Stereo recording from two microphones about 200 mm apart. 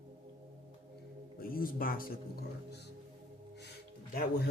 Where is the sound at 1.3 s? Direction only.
45° left (ahead or behind).